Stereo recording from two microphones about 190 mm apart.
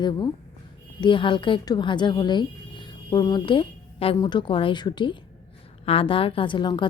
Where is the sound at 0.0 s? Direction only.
25° left (ahead or behind).